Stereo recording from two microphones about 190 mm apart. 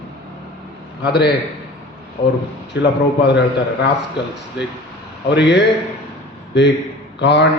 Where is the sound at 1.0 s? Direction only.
60° left (ahead or behind).